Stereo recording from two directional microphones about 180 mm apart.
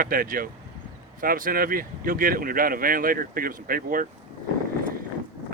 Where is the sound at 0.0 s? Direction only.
50° right (ahead or behind).